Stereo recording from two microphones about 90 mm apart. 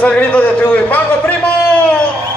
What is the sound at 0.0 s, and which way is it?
A man's voice, 15° left (ahead or behind).